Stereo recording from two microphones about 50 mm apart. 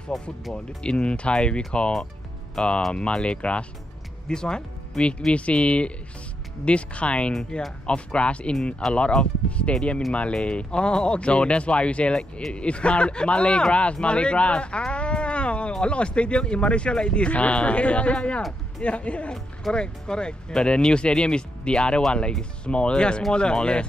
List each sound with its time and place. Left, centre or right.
0.1 s speech: centre
0.8 s speech: left
14.9 s a sound: left
15.7 s speech: left